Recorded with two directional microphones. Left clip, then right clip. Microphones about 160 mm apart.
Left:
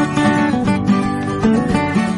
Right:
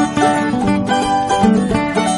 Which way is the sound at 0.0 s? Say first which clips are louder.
Right 2 dB; centre (ahead or behind).